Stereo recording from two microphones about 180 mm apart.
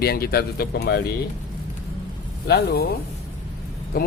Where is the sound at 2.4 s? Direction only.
65° left (ahead or behind).